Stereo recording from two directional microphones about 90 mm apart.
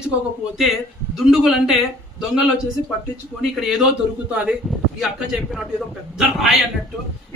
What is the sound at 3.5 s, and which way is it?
A man's voice, 5° right (ahead or behind).